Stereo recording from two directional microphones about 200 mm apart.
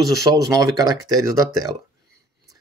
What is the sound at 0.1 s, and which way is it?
Speech, 15° right (ahead or behind).